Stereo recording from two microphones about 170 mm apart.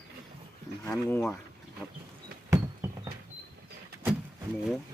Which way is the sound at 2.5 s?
20° right (ahead or behind).